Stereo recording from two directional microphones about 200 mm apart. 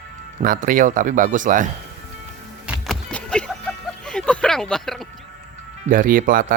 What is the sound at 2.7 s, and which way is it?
Music, 5° left (ahead or behind).